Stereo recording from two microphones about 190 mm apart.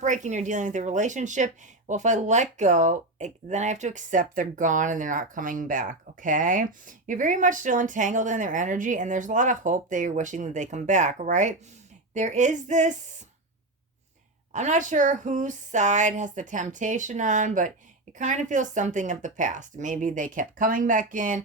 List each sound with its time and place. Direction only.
0.0 s speech: 40° right (ahead or behind)
14.5 s speech: 40° right (ahead or behind)